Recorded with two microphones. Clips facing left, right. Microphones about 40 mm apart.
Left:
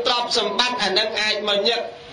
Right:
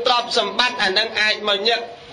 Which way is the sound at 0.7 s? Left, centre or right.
Right.